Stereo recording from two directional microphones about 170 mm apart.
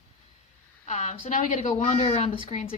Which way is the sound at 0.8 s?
45° left (ahead or behind).